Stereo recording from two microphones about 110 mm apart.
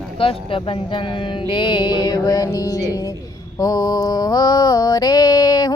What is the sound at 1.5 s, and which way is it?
Mantra, 45° left (ahead or behind).